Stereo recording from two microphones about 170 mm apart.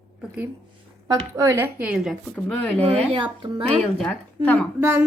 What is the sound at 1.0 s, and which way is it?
Speech, 20° right (ahead or behind).